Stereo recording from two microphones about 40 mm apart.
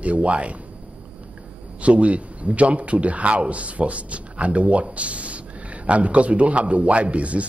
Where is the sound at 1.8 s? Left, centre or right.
Right.